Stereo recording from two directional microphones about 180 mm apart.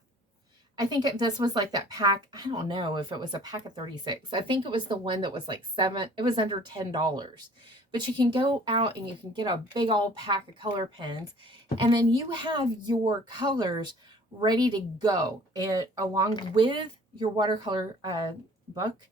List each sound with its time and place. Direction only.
0.8 s a woman's voice: 20° right (ahead or behind)